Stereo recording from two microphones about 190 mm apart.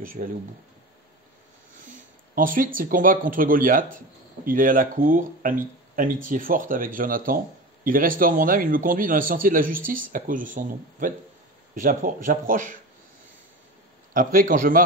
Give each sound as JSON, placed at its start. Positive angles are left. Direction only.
{"t": 0.0, "sound": "speech", "side_deg": -45}
{"t": 1.9, "sound": "speech", "side_deg": -45}
{"t": 14.1, "sound": "speech", "side_deg": -45}